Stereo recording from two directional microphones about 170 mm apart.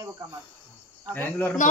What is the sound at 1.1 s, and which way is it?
Speech, 10° left (ahead or behind).